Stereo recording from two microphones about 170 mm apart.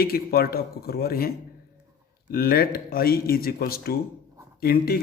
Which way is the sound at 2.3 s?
60° left (ahead or behind).